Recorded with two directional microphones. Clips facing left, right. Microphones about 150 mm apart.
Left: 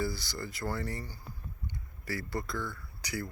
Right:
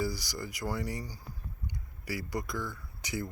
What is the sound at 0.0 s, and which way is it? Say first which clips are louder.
Speech: right 1 dB; 15° right (ahead or behind).